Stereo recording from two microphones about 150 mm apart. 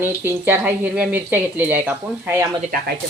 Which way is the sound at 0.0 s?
15° right (ahead or behind).